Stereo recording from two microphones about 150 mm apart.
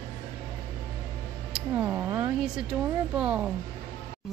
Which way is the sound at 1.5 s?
10° right (ahead or behind).